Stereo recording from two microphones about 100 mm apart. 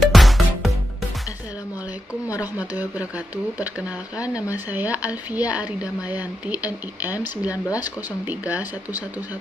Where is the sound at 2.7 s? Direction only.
15° right (ahead or behind).